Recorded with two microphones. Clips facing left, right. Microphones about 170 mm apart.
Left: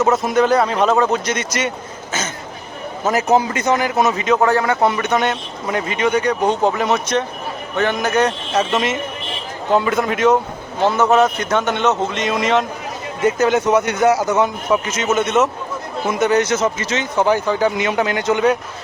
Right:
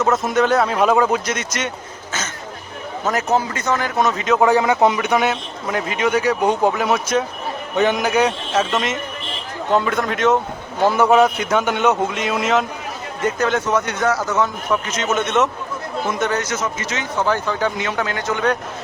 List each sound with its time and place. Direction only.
0.0 s speech: centre (ahead or behind)
3.3 s speech: 15° left (ahead or behind)
4.4 s a man's voice: 15° right (ahead or behind)
8.7 s speech: centre (ahead or behind)
10.8 s a man's voice: 10° right (ahead or behind)
13.4 s speech: 10° left (ahead or behind)
16.3 s speech: 25° left (ahead or behind)